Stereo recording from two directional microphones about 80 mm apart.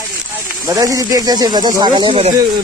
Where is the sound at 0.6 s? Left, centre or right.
Right.